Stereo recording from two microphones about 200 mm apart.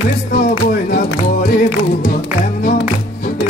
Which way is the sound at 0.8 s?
45° left (ahead or behind).